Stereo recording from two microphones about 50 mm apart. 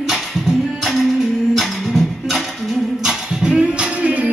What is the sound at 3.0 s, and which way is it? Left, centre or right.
Music, centre.